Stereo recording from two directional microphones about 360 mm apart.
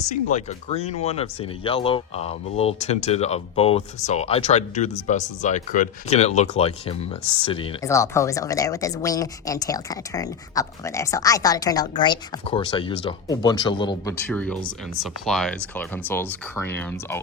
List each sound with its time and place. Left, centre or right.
0.1 s speech: centre